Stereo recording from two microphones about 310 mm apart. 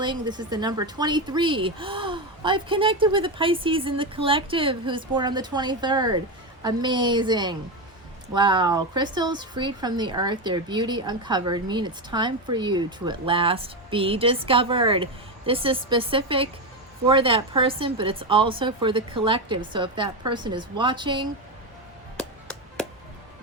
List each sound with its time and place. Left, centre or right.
0.0 s a woman's voice: centre
22.2 s music: centre